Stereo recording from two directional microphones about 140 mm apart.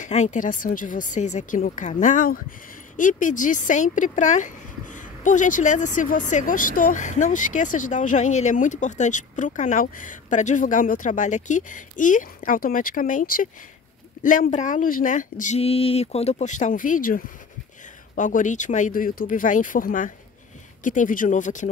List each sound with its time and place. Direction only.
0.0 s speech: 55° left (ahead or behind)